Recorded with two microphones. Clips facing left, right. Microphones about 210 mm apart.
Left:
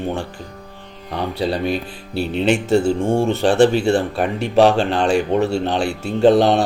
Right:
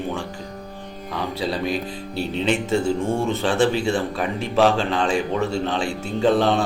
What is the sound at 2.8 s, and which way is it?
Speech, 30° left (ahead or behind).